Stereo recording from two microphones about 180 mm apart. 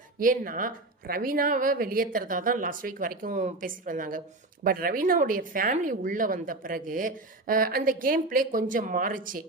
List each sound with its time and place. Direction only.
0.2 s speech: 50° right (ahead or behind)